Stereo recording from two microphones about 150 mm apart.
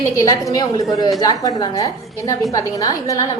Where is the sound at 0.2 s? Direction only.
20° left (ahead or behind).